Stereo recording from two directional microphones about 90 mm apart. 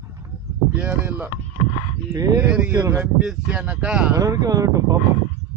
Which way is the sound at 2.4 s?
10° right (ahead or behind).